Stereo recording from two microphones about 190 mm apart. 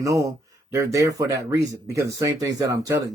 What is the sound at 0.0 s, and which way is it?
Speech, 15° right (ahead or behind).